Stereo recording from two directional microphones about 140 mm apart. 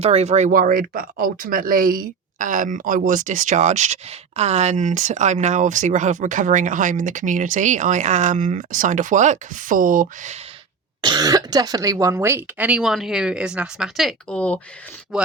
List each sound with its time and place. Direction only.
0.0 s speech: 50° right (ahead or behind); by 10.3 s 75° right (ahead or behind)
11.0 s speech: 30° right (ahead or behind); by 14.6 s 10° left (ahead or behind)
15.1 s speech: 5° right (ahead or behind)